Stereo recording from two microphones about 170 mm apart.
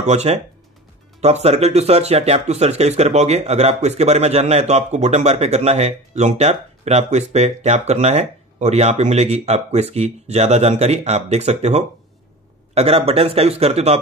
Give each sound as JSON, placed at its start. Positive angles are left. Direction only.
{"t": 0.0, "sound": "speech", "side_deg": -40}